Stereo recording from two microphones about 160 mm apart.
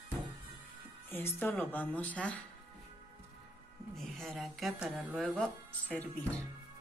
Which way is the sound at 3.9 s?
Centre (ahead or behind).